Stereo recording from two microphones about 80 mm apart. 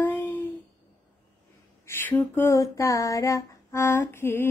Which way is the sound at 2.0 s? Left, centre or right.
Left.